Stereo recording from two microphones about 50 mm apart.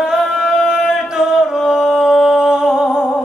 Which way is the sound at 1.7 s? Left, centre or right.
Centre.